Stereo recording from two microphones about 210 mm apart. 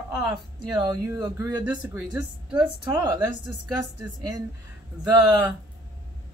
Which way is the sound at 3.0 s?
15° right (ahead or behind).